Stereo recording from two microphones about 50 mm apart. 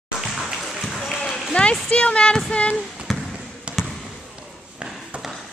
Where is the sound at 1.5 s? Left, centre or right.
Left.